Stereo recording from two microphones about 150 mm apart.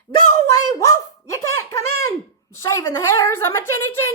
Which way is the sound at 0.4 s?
20° left (ahead or behind).